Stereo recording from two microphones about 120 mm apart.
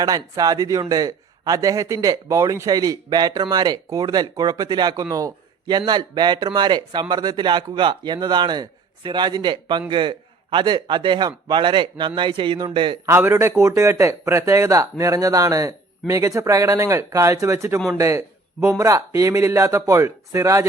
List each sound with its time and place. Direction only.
0.0 s speech: 30° right (ahead or behind)
13.1 s speech: 20° right (ahead or behind)